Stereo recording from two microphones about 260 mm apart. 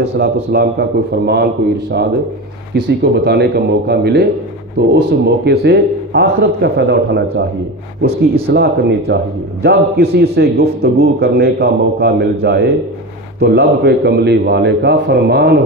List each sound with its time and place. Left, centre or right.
0.0 s a man's voice: right
8.5 s a man's voice: right